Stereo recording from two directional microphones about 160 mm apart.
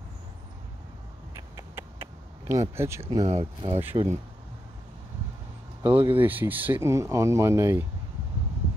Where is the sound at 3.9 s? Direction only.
30° right (ahead or behind).